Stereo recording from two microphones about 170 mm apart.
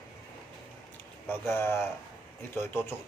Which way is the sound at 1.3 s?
15° left (ahead or behind).